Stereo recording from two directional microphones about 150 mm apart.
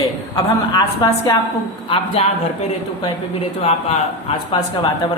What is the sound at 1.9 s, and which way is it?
Speech, 40° left (ahead or behind).